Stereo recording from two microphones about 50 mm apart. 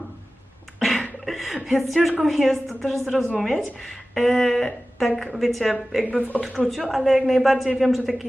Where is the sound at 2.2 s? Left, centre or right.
Centre.